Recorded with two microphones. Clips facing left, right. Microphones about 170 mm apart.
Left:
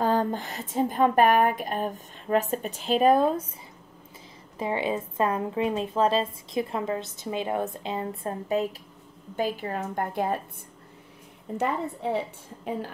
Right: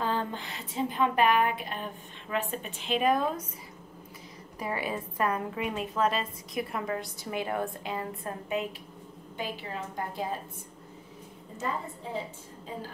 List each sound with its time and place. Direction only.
0.0 s a woman's voice: 40° left (ahead or behind)
4.6 s a woman's voice: 25° left (ahead or behind)
9.4 s a woman's voice: 50° left (ahead or behind)
11.5 s a woman's voice: 70° left (ahead or behind)